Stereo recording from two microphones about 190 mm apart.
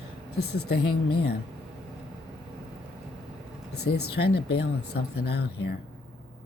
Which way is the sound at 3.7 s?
60° left (ahead or behind).